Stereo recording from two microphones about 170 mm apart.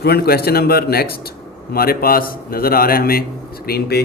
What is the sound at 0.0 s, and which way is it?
A man's voice, 70° left (ahead or behind).